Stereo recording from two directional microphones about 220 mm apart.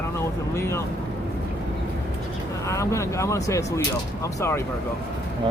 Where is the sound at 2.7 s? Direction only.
15° left (ahead or behind).